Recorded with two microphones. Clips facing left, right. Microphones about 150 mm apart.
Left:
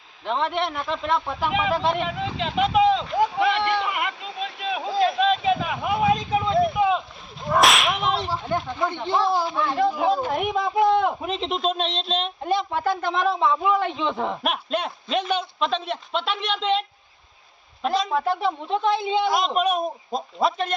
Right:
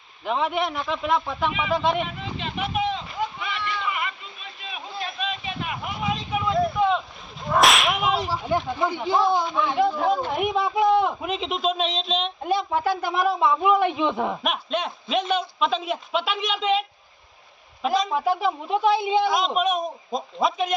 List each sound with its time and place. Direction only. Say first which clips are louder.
0.3 s a man's voice: even; 5° right (ahead or behind)
2.0 s a sound: left 3 dB; 90° left
6.3 s a sound: left 3 dB; 25° left (ahead or behind)
6.7 s rowboat: left 1 dB; 5° left (ahead or behind)
7.5 s whip: even; centre (ahead or behind)
10.8 s speech: right 2 dB; 10° right (ahead or behind)
14.4 s a man's voice: left 1 dB; centre (ahead or behind)
17.8 s speech: even; 5° right (ahead or behind)
19.3 s a man's voice: left 1 dB; 5° left (ahead or behind)